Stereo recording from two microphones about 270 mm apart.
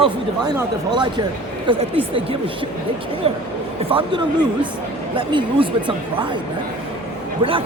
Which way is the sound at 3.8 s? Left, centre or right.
Centre.